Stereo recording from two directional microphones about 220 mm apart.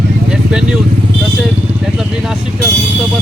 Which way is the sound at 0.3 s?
5° right (ahead or behind).